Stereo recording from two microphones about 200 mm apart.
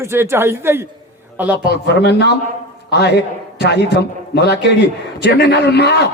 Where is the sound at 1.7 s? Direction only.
55° left (ahead or behind).